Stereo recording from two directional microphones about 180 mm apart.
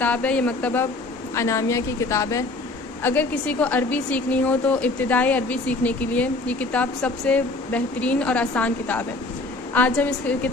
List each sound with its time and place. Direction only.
0.0 s a woman's voice: 10° left (ahead or behind)